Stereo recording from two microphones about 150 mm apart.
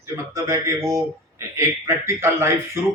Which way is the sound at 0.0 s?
20° right (ahead or behind).